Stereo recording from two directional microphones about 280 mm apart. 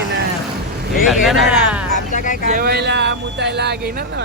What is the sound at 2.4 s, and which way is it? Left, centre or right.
Speech, right.